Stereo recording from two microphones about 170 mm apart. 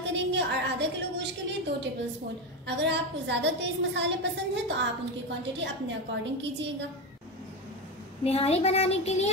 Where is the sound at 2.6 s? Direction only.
90° right.